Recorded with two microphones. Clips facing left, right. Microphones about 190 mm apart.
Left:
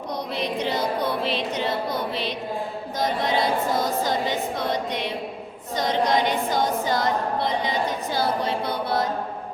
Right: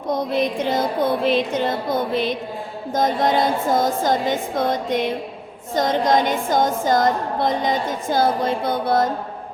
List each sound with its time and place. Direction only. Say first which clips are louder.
0.1 s a woman's voice: right 8 dB; 50° right (ahead or behind)